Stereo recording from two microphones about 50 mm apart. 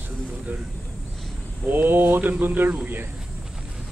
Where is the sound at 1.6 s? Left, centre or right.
Right.